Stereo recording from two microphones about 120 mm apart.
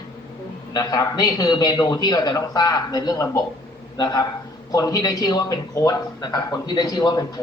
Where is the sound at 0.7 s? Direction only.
30° left (ahead or behind).